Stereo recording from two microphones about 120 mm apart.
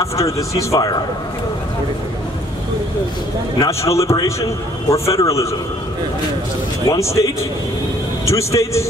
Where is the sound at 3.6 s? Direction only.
25° left (ahead or behind).